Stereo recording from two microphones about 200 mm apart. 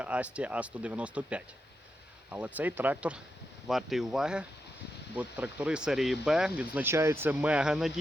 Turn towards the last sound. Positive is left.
turn(degrees=-5)  # may be behind; listen again after turning